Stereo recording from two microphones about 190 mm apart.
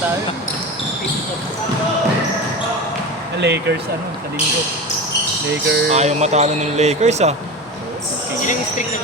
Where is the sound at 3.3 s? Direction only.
65° right (ahead or behind).